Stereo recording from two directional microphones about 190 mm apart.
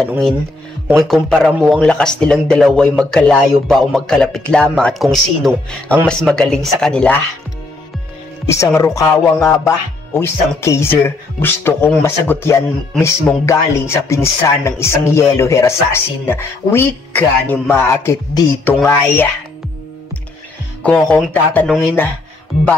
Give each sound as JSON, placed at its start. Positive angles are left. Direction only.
{"t": 0.8, "sound": "a man's voice", "side_deg": 0}
{"t": 8.5, "sound": "speech", "side_deg": 15}
{"t": 20.8, "sound": "speech", "side_deg": 5}